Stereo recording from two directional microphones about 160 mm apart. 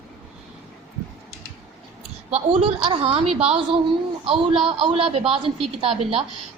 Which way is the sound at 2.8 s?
35° right (ahead or behind).